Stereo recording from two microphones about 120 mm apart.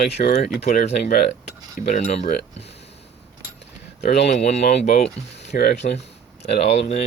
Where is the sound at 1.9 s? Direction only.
65° left (ahead or behind).